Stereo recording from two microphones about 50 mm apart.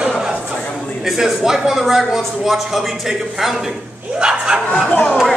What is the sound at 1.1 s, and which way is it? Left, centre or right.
A man's voice, centre.